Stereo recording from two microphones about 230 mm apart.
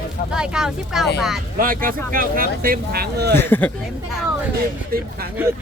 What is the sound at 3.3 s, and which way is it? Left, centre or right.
Speech, centre.